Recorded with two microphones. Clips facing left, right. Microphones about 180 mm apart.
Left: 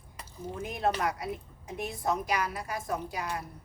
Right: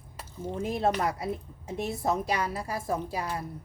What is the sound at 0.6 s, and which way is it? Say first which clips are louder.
A woman's voice: right 3 dB; 25° right (ahead or behind).